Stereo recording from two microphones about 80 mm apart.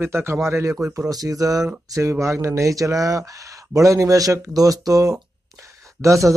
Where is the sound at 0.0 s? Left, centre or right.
Right.